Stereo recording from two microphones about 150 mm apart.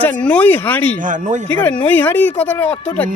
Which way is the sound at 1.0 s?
60° right (ahead or behind).